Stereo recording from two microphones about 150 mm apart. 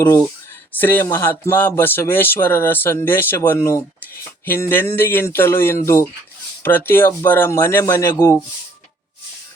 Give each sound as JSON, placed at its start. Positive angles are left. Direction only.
{"t": 0.0, "sound": "speech", "side_deg": 20}